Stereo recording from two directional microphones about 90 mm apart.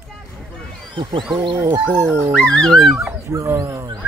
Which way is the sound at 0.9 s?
65° right (ahead or behind).